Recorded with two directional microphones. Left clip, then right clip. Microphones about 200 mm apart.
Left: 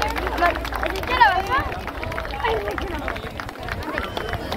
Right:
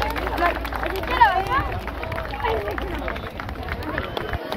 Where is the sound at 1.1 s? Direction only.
25° left (ahead or behind).